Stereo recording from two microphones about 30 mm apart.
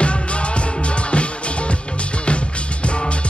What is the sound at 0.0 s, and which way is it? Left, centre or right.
Music, left.